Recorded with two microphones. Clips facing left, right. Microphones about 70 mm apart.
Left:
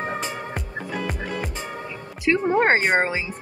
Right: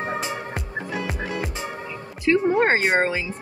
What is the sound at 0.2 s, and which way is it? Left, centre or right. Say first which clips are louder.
Music: right 1 dB; centre.